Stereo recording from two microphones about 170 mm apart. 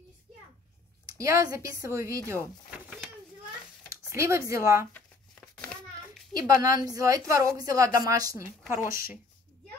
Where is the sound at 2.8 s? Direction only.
Centre (ahead or behind).